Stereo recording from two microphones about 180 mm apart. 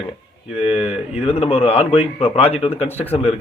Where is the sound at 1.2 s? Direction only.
35° left (ahead or behind).